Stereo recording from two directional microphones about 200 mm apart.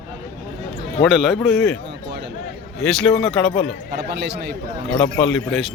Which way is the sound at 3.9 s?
55° right (ahead or behind).